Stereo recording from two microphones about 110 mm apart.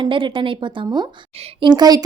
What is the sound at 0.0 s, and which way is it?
A woman's voice, 50° right (ahead or behind).